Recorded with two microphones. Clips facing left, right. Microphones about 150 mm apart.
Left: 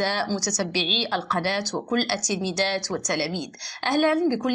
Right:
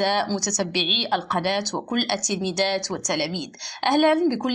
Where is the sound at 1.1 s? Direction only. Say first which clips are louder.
Right 4 dB; 20° right (ahead or behind).